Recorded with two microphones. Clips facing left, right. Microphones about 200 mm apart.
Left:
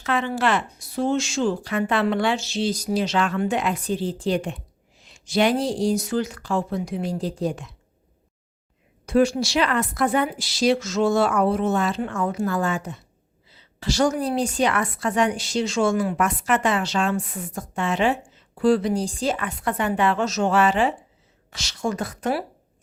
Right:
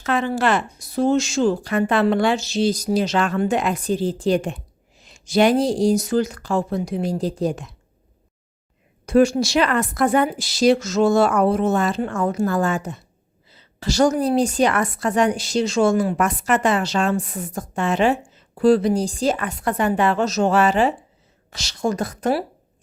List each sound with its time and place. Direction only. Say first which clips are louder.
0.0 s a woman's voice: right 3 dB; 40° right (ahead or behind)
9.0 s a woman's voice: right 3 dB; 45° right (ahead or behind)